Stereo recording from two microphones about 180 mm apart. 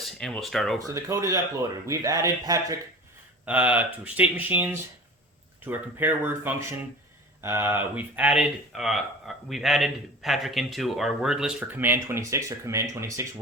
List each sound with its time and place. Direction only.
0.0 s speech: centre (ahead or behind)
0.9 s a man's voice: 15° right (ahead or behind)
3.4 s speech: 10° right (ahead or behind)